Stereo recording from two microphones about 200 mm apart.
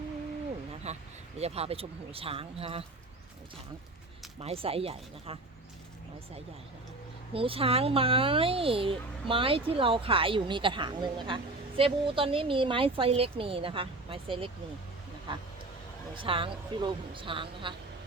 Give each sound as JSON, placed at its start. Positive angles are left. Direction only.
{"t": 0.9, "sound": "speech", "side_deg": -35}
{"t": 4.4, "sound": "speech", "side_deg": -30}
{"t": 7.3, "sound": "speech", "side_deg": -25}
{"t": 16.2, "sound": "speech", "side_deg": -25}